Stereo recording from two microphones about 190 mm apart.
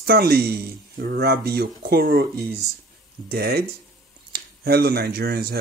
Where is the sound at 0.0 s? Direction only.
55° right (ahead or behind).